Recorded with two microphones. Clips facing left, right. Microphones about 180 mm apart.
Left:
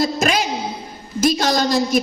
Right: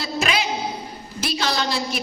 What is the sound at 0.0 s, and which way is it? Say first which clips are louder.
A woman's voice: left 5 dB; 45° left (ahead or behind).